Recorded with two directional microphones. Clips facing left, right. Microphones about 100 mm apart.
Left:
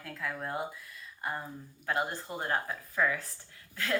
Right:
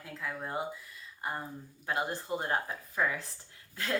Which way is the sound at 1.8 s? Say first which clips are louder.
Left 1 dB; 20° right (ahead or behind).